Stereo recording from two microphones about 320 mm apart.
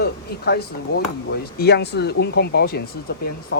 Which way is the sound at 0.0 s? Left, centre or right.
Left.